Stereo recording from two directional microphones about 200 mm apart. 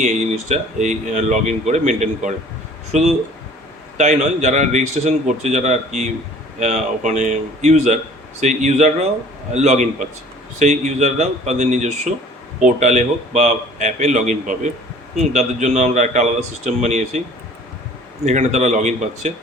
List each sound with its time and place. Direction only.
0.0 s speech: 35° right (ahead or behind)
18.3 s speech: 35° right (ahead or behind)